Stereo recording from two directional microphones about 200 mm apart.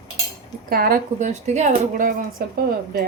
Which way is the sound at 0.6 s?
45° right (ahead or behind).